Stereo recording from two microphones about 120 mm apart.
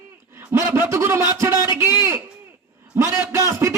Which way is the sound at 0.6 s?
25° right (ahead or behind).